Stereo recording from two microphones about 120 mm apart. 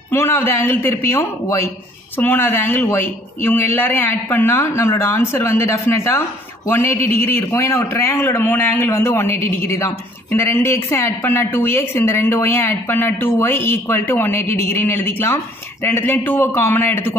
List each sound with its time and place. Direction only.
0.1 s speech: 20° left (ahead or behind)